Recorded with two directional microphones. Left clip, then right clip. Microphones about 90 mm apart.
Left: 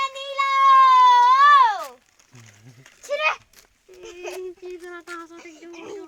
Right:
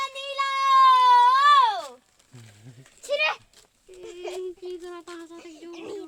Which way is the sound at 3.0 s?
55° right (ahead or behind).